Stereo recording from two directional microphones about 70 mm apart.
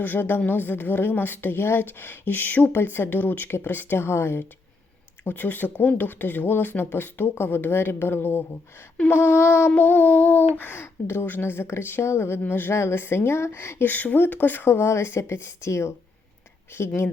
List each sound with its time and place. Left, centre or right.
0.0 s speech: left
9.7 s speech: left